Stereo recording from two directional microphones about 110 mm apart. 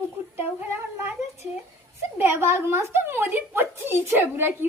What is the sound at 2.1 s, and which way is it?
A woman's voice, 20° right (ahead or behind).